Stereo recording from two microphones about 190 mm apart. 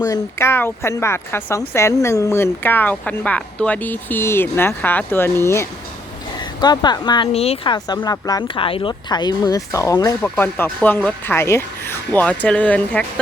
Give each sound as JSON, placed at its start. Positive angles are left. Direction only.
{"t": 0.0, "sound": "speech", "side_deg": 15}